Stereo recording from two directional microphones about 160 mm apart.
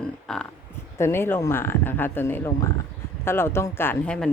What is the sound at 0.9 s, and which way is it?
A woman's voice, 15° left (ahead or behind).